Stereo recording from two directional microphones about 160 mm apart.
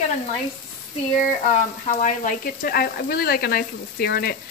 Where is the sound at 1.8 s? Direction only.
55° left (ahead or behind); by 4.3 s 70° left (ahead or behind).